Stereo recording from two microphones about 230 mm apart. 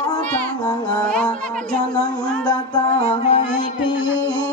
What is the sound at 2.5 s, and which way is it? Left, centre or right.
Music, left.